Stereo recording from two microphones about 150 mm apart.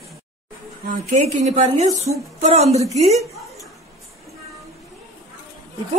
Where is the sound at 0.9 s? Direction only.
55° right (ahead or behind).